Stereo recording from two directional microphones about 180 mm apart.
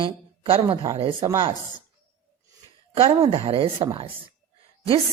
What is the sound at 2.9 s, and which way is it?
Speech, 30° right (ahead or behind).